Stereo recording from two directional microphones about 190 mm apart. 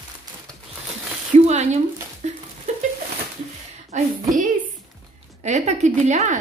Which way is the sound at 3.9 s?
40° right (ahead or behind).